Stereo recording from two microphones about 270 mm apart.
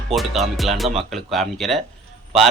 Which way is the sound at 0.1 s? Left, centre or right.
Centre.